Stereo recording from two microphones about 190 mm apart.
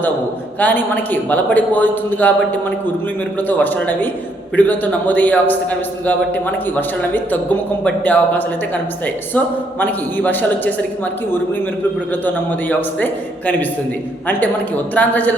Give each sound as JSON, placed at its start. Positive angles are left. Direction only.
{"t": 0.6, "sound": "a man's voice", "side_deg": 10}
{"t": 9.8, "sound": "a man's voice", "side_deg": 10}
{"t": 12.2, "sound": "a man's voice", "side_deg": 10}
{"t": 14.3, "sound": "a man's voice", "side_deg": 10}